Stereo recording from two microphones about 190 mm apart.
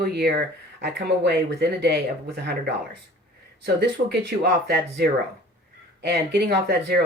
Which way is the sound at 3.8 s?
60° right (ahead or behind).